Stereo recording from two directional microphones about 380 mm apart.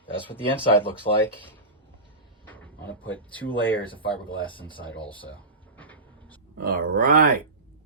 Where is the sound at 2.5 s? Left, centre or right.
Centre.